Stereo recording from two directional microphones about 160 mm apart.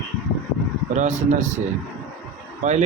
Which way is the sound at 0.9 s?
45° right (ahead or behind).